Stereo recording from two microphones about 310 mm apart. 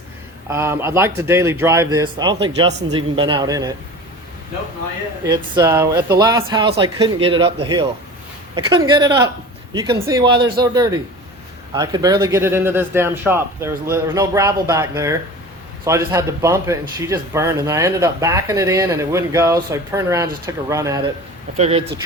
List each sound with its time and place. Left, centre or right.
0.5 s a man's voice: centre
5.2 s a man's voice: centre
10.2 s speech: right
10.6 s a man's voice: centre
21.6 s speech: centre